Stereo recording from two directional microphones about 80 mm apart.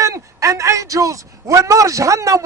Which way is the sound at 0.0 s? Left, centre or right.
Right.